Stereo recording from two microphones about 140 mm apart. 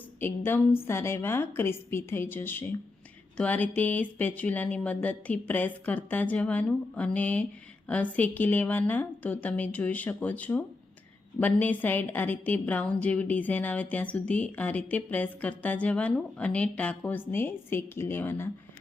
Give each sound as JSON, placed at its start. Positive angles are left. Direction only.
{"t": 0.2, "sound": "a woman's voice", "side_deg": 15}